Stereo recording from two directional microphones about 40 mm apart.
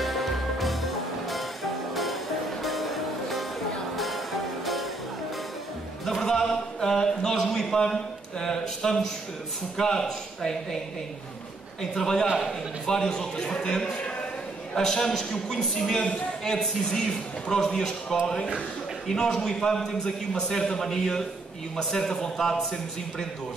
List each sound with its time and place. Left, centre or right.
0.0 s music: centre
6.2 s a sound: centre
9.8 s a man's voice: centre
11.9 s a man's voice: centre